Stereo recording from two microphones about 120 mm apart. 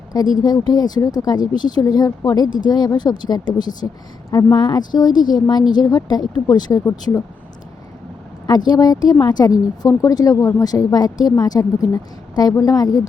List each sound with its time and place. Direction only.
0.1 s a woman's voice: 35° left (ahead or behind)
4.3 s speech: 25° left (ahead or behind)
4.5 s a woman's voice: 35° left (ahead or behind)
8.4 s a woman's voice: 35° left (ahead or behind)